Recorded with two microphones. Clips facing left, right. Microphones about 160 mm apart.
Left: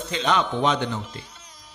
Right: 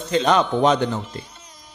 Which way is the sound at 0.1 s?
40° right (ahead or behind).